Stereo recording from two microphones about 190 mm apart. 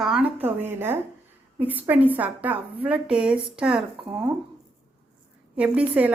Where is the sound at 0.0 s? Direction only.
5° right (ahead or behind).